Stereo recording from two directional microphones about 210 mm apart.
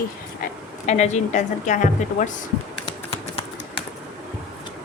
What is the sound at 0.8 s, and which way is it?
Speech, 35° left (ahead or behind).